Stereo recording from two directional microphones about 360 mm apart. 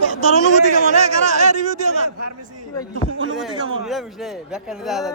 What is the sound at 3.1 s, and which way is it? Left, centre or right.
Speech, right.